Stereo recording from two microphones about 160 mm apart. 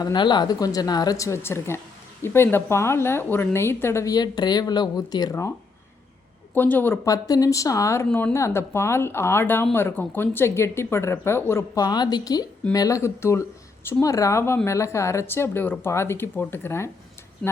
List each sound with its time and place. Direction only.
0.0 s a woman's voice: 30° left (ahead or behind)
6.5 s a woman's voice: 10° left (ahead or behind)